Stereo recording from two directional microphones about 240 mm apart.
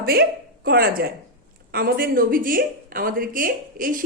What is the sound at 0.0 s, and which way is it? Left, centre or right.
Speech, right.